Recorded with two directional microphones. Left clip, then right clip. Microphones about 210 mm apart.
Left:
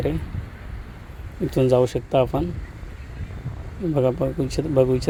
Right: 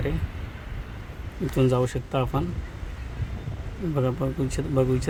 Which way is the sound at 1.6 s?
25° left (ahead or behind).